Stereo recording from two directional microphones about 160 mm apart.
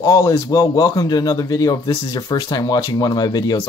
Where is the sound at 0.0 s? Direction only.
25° left (ahead or behind).